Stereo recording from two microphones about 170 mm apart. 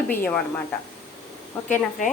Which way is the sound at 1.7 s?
50° left (ahead or behind).